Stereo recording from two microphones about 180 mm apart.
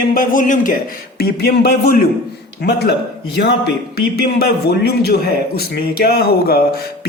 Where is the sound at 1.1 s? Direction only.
60° left (ahead or behind).